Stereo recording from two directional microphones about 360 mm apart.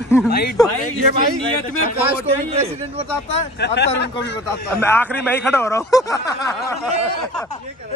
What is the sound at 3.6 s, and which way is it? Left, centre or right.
Speech, left.